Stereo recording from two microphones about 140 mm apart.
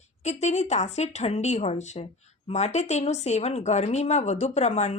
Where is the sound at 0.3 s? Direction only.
55° left (ahead or behind).